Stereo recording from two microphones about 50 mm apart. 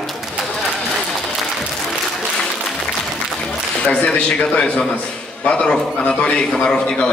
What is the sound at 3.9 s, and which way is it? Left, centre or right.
A man's voice, left.